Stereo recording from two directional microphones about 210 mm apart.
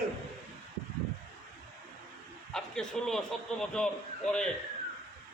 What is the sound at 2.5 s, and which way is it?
A man's voice, centre (ahead or behind).